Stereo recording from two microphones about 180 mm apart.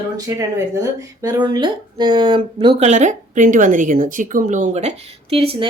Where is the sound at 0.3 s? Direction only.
20° right (ahead or behind).